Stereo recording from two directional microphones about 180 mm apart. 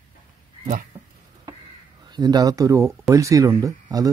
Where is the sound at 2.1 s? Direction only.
20° right (ahead or behind).